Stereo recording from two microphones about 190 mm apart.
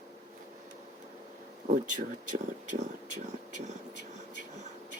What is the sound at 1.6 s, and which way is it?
Speech, 40° right (ahead or behind).